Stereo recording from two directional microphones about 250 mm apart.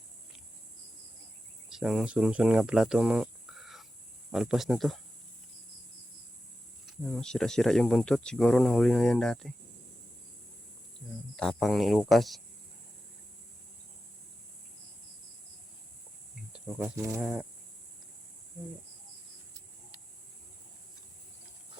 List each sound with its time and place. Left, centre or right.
1.7 s speech: centre
7.0 s speech: centre
11.3 s speech: centre
16.5 s speech: centre